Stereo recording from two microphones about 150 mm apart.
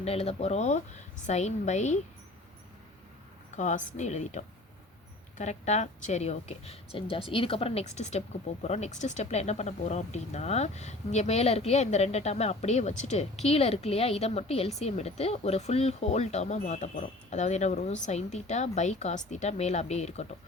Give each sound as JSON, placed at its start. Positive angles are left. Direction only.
{"t": 0.0, "sound": "speech", "side_deg": 40}
{"t": 3.6, "sound": "speech", "side_deg": 55}